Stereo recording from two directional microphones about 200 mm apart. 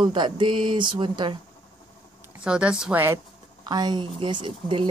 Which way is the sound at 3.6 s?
20° right (ahead or behind).